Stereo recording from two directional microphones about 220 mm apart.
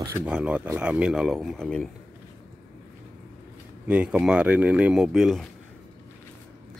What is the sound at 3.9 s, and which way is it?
Speech, 5° right (ahead or behind).